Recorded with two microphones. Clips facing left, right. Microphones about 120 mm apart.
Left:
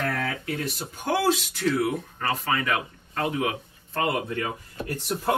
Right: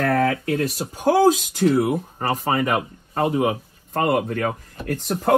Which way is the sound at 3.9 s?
55° right (ahead or behind).